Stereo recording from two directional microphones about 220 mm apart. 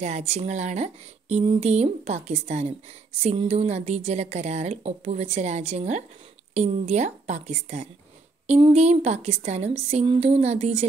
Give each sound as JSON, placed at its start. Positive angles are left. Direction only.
{"t": 0.0, "sound": "a woman's voice", "side_deg": -30}